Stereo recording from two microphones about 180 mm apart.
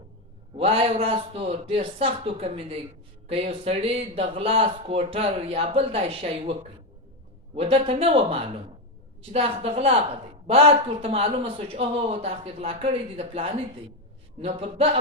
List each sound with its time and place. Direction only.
0.5 s speech: 30° right (ahead or behind)